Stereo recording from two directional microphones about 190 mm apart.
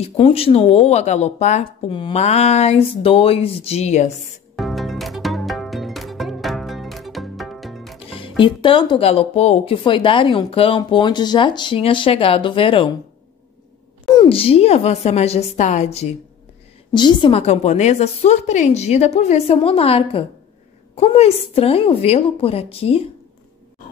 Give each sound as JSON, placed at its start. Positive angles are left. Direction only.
{"t": 0.0, "sound": "speech", "side_deg": 30}
{"t": 4.6, "sound": "music", "side_deg": 0}
{"t": 8.1, "sound": "speech", "side_deg": 25}
{"t": 14.1, "sound": "speech", "side_deg": 25}
{"t": 16.9, "sound": "speech", "side_deg": 25}